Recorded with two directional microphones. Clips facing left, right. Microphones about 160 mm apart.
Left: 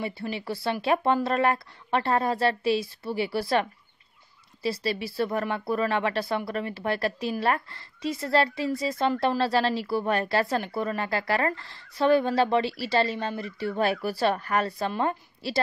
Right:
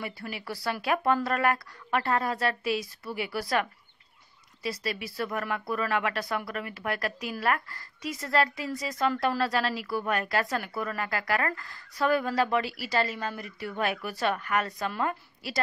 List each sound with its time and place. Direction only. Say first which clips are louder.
0.0 s speech: left 5 dB; 25° left (ahead or behind)
4.6 s speech: left 5 dB; 30° left (ahead or behind)